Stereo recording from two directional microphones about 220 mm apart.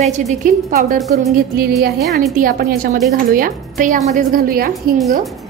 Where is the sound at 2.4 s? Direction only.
40° right (ahead or behind).